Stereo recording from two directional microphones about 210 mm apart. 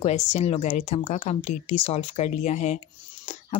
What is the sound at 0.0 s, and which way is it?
Speech, 30° left (ahead or behind).